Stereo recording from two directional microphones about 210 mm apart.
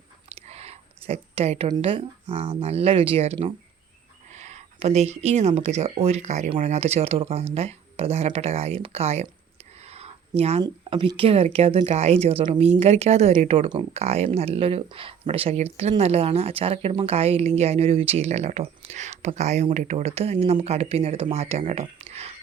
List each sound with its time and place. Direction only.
0.3 s speech: 30° right (ahead or behind)
9.8 s a sound: 30° right (ahead or behind)
10.6 s speech: 25° right (ahead or behind)